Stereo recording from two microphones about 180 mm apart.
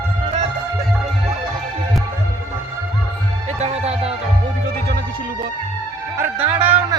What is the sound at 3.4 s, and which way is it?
Music, 35° right (ahead or behind).